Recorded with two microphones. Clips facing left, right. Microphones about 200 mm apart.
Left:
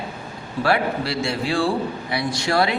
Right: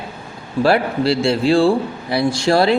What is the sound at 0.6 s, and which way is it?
Speech, 30° right (ahead or behind).